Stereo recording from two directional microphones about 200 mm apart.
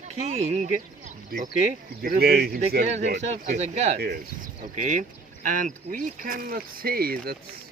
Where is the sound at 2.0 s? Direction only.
50° right (ahead or behind).